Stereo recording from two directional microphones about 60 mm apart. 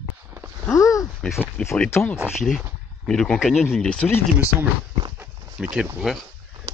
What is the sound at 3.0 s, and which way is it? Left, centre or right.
Speech, centre.